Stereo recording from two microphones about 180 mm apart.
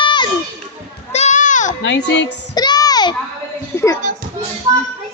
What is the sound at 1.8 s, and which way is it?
Speech, 85° left.